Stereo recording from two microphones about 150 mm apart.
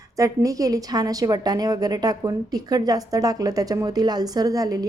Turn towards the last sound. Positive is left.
turn(degrees=-25)  # may be behind; listen again after turning